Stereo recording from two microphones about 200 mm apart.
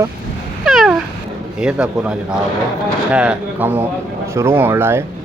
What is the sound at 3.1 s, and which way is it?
Speech, 5° right (ahead or behind).